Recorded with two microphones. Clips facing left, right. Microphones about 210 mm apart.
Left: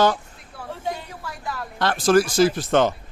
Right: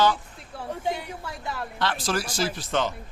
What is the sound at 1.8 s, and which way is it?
Speech, 45° left (ahead or behind).